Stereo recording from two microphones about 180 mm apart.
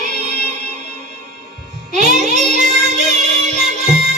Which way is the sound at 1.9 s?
40° right (ahead or behind).